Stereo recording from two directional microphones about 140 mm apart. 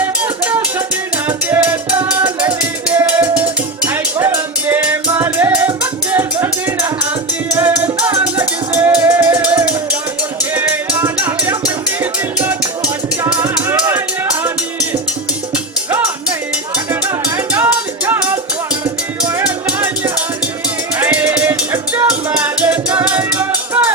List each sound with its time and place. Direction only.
0.0 s music: 10° right (ahead or behind)
15.5 s music: 10° right (ahead or behind)
17.2 s music: 15° right (ahead or behind)
19.3 s music: 10° right (ahead or behind)
21.0 s music: 10° right (ahead or behind)